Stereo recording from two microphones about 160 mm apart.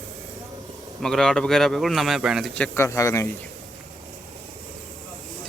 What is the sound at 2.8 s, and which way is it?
Speech, 20° left (ahead or behind).